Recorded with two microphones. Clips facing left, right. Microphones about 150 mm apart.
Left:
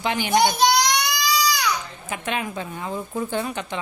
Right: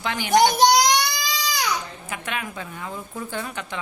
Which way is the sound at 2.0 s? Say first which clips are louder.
Left 6 dB; 25° left (ahead or behind).